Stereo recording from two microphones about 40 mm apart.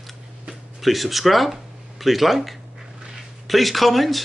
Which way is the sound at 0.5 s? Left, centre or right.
Centre.